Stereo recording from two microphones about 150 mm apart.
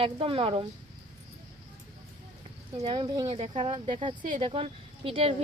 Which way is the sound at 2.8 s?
30° right (ahead or behind).